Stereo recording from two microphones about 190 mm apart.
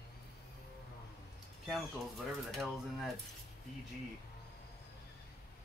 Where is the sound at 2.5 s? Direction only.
Centre (ahead or behind).